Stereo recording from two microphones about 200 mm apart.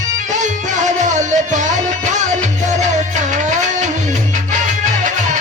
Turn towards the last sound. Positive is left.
turn(degrees=-40)  # may be behind; listen again after turning